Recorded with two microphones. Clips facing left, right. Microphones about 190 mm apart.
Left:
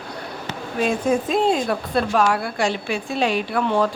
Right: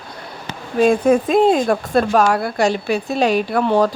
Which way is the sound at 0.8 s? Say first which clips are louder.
Right 7 dB; 55° right (ahead or behind).